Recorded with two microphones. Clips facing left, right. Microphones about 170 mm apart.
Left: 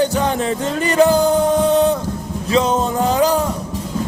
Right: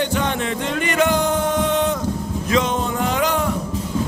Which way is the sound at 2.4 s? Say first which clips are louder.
Left 4 dB; 35° left (ahead or behind).